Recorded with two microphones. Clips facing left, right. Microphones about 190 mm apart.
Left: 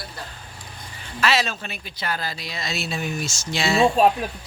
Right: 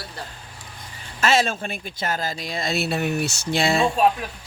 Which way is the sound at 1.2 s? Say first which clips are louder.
Right 3 dB; 50° right (ahead or behind).